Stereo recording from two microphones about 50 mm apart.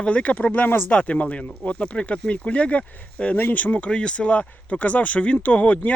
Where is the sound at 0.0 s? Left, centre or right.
Left.